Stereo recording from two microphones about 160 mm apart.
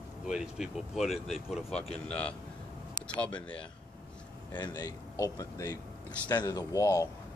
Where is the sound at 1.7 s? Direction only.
40° left (ahead or behind).